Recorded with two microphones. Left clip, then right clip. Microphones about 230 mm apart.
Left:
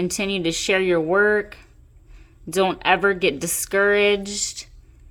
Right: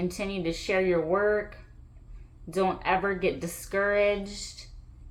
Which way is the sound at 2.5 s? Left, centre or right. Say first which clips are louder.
Left 7 dB; left.